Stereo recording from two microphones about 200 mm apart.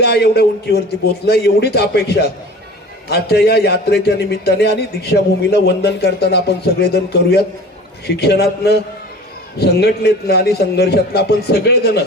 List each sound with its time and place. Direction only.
0.0 s a man's voice: 55° left (ahead or behind)